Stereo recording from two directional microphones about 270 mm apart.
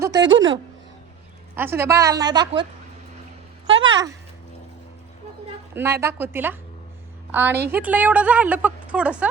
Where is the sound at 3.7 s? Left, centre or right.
Right.